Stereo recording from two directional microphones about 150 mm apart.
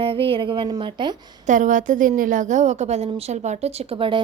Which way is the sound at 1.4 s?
60° right (ahead or behind).